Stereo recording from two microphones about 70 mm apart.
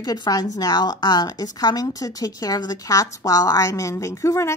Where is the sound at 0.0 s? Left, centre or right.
Left.